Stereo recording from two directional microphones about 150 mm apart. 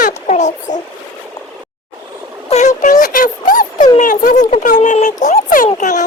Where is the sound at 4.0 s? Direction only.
60° left (ahead or behind).